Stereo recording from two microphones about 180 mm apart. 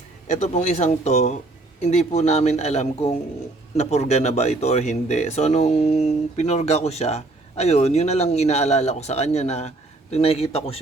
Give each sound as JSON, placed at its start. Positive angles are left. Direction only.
{"t": 0.3, "sound": "speech", "side_deg": 40}